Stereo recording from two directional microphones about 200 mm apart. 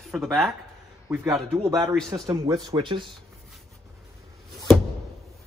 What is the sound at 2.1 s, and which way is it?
Speech, 20° right (ahead or behind).